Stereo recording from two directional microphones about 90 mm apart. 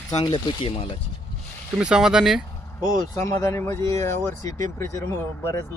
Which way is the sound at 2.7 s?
35° left (ahead or behind).